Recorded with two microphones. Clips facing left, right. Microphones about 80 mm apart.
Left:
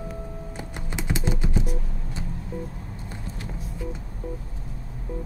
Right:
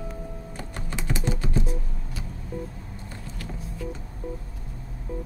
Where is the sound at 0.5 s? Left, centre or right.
Centre.